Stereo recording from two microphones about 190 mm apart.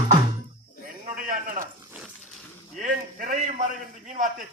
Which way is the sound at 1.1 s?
45° right (ahead or behind).